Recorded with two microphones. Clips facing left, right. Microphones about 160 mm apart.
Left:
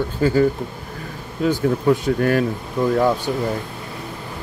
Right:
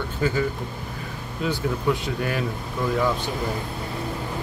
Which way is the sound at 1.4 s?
45° left (ahead or behind).